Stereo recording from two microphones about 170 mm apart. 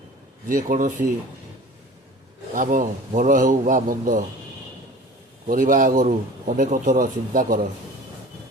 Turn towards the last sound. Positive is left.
turn(degrees=-55)  # may be behind; listen again after turning